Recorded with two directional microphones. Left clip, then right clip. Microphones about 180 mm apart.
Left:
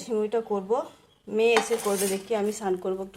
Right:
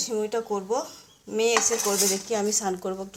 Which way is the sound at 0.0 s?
Centre (ahead or behind).